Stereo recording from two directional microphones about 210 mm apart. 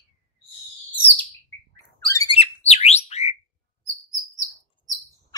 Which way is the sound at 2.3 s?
30° left (ahead or behind).